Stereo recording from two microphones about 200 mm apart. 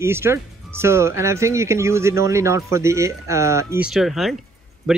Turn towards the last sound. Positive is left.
turn(degrees=0)  # may be behind; listen again after turning